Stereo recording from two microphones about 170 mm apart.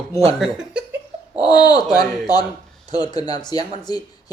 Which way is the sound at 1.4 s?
25° left (ahead or behind).